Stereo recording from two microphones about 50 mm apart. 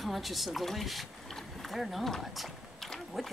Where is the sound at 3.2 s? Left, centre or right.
Centre.